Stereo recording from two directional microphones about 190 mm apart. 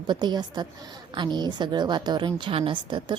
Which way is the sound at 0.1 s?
25° right (ahead or behind).